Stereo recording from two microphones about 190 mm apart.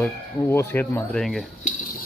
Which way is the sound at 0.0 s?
15° left (ahead or behind).